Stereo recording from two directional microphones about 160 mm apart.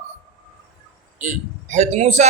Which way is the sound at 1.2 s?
45° right (ahead or behind).